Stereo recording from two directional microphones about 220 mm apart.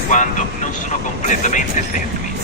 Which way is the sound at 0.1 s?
35° left (ahead or behind).